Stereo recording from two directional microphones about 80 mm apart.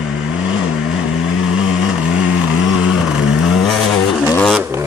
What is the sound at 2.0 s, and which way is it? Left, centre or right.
Vehicle, centre.